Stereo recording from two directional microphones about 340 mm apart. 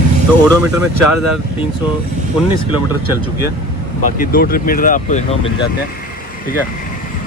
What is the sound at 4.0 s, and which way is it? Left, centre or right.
Speech, left.